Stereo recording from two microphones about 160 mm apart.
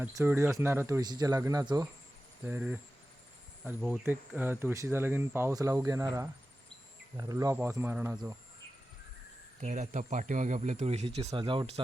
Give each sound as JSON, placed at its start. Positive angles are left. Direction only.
{"t": 0.1, "sound": "speech", "side_deg": -15}
{"t": 2.4, "sound": "speech", "side_deg": -10}
{"t": 9.6, "sound": "speech", "side_deg": -50}
{"t": 11.3, "sound": "speech", "side_deg": -30}